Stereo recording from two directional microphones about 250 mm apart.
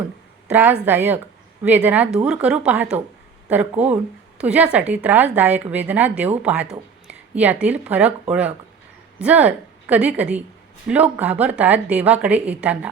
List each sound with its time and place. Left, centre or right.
0.4 s a woman's voice: centre